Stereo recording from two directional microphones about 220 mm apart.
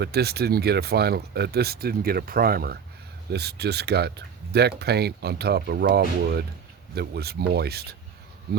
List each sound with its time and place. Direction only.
0.0 s speech: 45° right (ahead or behind)